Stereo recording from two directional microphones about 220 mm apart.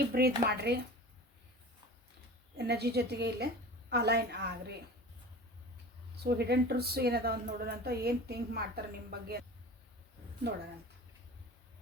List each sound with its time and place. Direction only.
0.1 s a woman's voice: 45° right (ahead or behind)
2.6 s a woman's voice: 50° right (ahead or behind)
6.2 s a woman's voice: 50° right (ahead or behind)